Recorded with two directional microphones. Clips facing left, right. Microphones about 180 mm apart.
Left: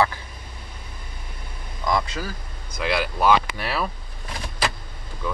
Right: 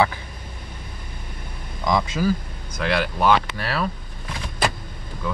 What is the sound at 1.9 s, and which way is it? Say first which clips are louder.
Speech: right 2 dB; 20° right (ahead or behind).